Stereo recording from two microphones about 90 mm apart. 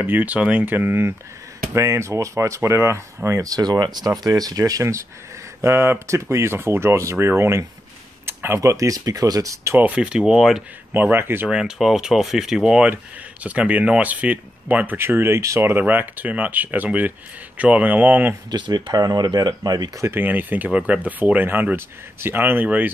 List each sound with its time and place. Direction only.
0.0 s speech: 20° right (ahead or behind); by 9.8 s 40° right (ahead or behind)
9.8 s speech: 15° right (ahead or behind)
10.9 s speech: 20° right (ahead or behind)
11.4 s speech: 10° right (ahead or behind); by 15.8 s 30° right (ahead or behind)
15.8 s speech: 20° right (ahead or behind)
18.5 s speech: 55° right (ahead or behind)
20.0 s speech: 25° right (ahead or behind)